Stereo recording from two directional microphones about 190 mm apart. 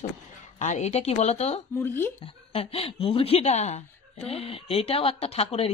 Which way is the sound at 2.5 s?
30° left (ahead or behind).